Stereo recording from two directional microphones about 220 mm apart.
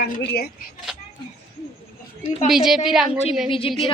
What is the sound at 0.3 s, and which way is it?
Speech, 45° left (ahead or behind).